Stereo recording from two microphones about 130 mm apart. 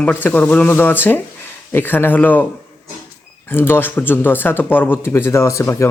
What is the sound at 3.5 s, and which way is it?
Speech, 15° left (ahead or behind).